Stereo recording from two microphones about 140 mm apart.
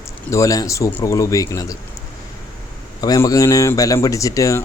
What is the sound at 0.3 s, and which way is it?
A man's voice, 25° left (ahead or behind).